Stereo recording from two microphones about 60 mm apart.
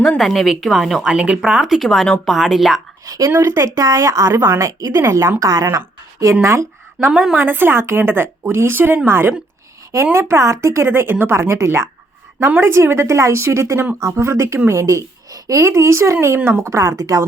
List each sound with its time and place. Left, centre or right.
0.2 s a woman's voice: centre
1.0 s a woman's voice: centre
3.2 s speech: right
4.9 s speech: right
5.4 s a woman's voice: right
7.1 s speech: centre
7.3 s a woman's voice: right
11.3 s a woman's voice: right
16.6 s speech: right